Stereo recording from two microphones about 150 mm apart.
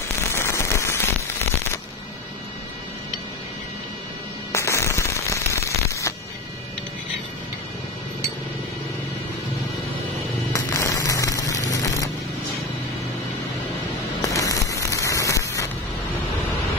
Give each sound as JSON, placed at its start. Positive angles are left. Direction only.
{"t": 0.3, "sound": "rain on surface", "side_deg": 20}
{"t": 4.5, "sound": "firecracker", "side_deg": 20}
{"t": 10.5, "sound": "music", "side_deg": 20}
{"t": 14.3, "sound": "rain on surface", "side_deg": 20}